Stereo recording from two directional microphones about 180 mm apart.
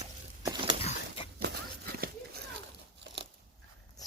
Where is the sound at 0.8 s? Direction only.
30° left (ahead or behind).